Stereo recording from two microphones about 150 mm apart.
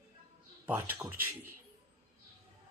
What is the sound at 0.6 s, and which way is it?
Speech, 10° right (ahead or behind).